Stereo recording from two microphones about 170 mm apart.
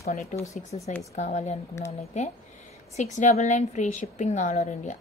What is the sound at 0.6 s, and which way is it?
A woman's voice, 50° left (ahead or behind).